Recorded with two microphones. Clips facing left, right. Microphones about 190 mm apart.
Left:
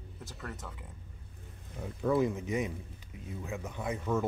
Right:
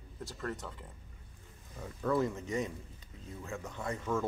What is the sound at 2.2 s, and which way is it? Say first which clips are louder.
A man's voice: left 3 dB; 15° left (ahead or behind).